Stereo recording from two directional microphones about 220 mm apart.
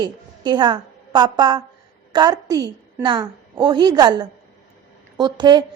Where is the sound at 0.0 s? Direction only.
20° right (ahead or behind).